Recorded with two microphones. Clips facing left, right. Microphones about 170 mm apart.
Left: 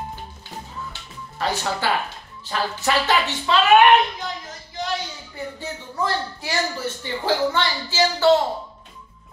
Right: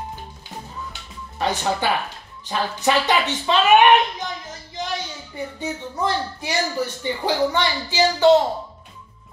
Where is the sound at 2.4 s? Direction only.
20° right (ahead or behind).